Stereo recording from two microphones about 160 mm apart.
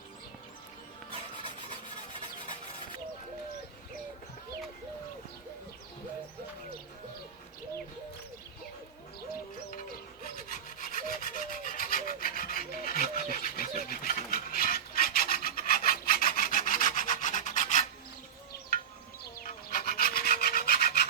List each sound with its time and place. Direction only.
10.3 s rub: 60° left (ahead or behind)
19.2 s rub: 60° left (ahead or behind)